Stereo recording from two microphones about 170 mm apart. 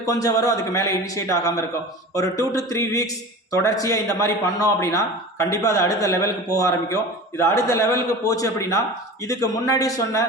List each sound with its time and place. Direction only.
0.0 s a man's voice: 20° left (ahead or behind)